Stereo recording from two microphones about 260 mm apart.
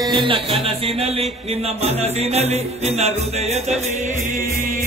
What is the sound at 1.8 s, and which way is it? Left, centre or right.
Music, right.